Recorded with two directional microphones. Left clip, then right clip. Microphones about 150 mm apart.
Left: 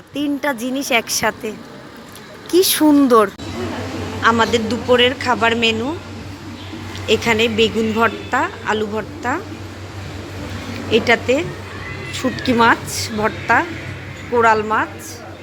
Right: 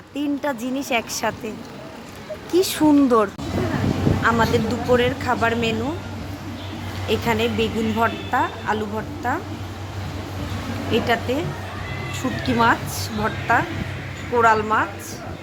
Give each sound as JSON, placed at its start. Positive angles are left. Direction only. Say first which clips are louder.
{"t": 0.1, "sound": "a woman's voice", "louder": "left 4 dB", "side_deg": 15}
{"t": 4.2, "sound": "speech", "louder": "left 5 dB", "side_deg": 25}
{"t": 7.1, "sound": "speech", "louder": "left 6 dB", "side_deg": 25}
{"t": 10.9, "sound": "a woman's voice", "louder": "left 7 dB", "side_deg": 35}